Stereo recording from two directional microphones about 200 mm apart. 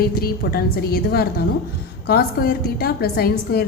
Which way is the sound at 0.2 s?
50° left (ahead or behind).